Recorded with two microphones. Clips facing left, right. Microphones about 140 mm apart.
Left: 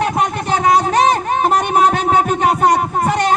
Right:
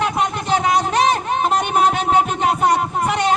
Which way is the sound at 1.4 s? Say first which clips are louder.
Left 3 dB; 45° left (ahead or behind).